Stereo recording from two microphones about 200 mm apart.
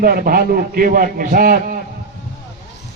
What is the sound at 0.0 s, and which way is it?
A man's voice, 45° right (ahead or behind).